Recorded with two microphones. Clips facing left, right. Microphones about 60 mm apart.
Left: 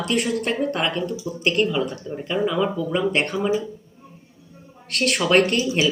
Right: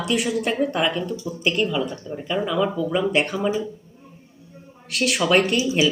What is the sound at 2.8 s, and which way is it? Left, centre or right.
Speech, centre.